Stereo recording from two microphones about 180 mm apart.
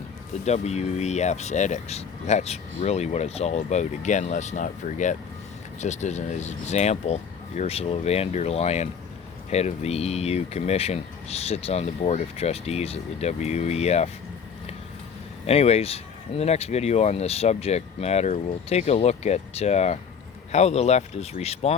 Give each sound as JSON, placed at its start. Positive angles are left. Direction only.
{"t": 0.4, "sound": "speech", "side_deg": 35}
{"t": 15.4, "sound": "speech", "side_deg": 35}